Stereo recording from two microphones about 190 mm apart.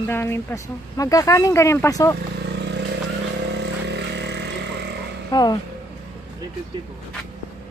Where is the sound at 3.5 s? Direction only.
65° right (ahead or behind).